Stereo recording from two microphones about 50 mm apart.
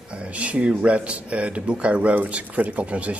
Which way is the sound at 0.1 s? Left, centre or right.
Right.